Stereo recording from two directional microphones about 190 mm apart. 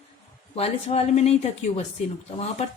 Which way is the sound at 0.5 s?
30° left (ahead or behind).